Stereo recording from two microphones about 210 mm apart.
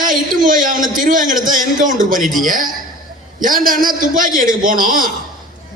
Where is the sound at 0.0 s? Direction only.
40° right (ahead or behind).